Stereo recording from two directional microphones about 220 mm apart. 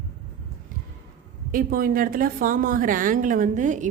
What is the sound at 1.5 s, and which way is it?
A woman's voice, 40° right (ahead or behind).